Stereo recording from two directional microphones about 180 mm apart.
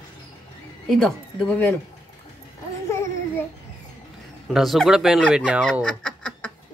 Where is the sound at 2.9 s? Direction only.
15° left (ahead or behind).